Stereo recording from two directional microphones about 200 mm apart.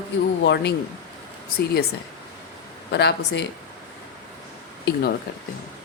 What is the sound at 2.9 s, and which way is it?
Speech, 55° left (ahead or behind).